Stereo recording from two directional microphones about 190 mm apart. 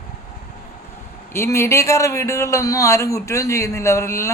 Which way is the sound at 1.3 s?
15° left (ahead or behind).